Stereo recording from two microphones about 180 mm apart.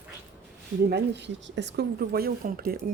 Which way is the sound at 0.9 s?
75° right (ahead or behind).